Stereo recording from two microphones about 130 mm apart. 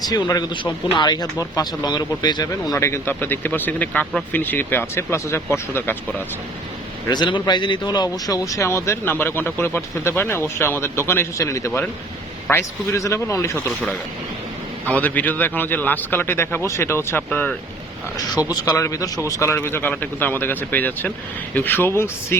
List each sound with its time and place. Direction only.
0.1 s speech: 30° left (ahead or behind)
7.1 s speech: 35° left (ahead or behind)
14.8 s speech: 10° left (ahead or behind)
18.3 s speech: 30° left (ahead or behind)